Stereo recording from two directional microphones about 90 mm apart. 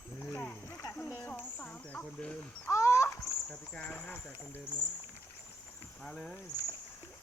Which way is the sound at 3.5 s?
15° left (ahead or behind).